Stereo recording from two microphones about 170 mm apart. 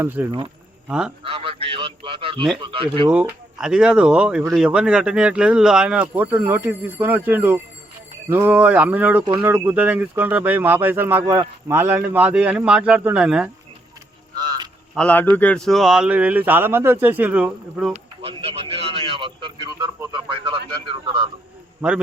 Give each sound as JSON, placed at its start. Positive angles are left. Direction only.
{"t": 0.0, "sound": "speech", "side_deg": -10}
{"t": 1.2, "sound": "a man's voice", "side_deg": -35}
{"t": 3.1, "sound": "speech", "side_deg": -5}
{"t": 14.3, "sound": "a sound", "side_deg": -25}
{"t": 14.9, "sound": "speech", "side_deg": 10}
{"t": 17.9, "sound": "radio", "side_deg": -35}
{"t": 20.0, "sound": "speech", "side_deg": -25}
{"t": 21.8, "sound": "a man's voice", "side_deg": -5}